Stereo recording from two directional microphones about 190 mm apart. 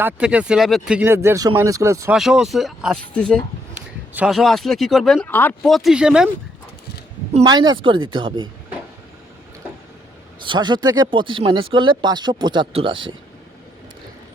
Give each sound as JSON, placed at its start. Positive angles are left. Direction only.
{"t": 0.0, "sound": "speech", "side_deg": -5}
{"t": 2.1, "sound": "speech", "side_deg": 0}
{"t": 3.8, "sound": "speech", "side_deg": -5}
{"t": 7.4, "sound": "speech", "side_deg": -20}
{"t": 10.4, "sound": "speech", "side_deg": -25}